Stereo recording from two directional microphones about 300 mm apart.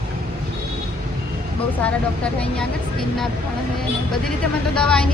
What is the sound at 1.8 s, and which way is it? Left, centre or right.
Speech, centre.